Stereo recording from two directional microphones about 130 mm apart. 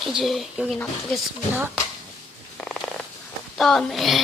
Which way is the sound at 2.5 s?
5° left (ahead or behind).